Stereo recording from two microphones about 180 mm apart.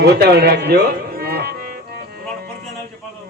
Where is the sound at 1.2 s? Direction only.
60° right (ahead or behind).